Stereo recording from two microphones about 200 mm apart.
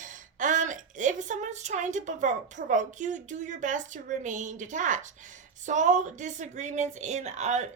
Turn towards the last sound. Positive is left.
turn(degrees=-35)  # may be behind; listen again after turning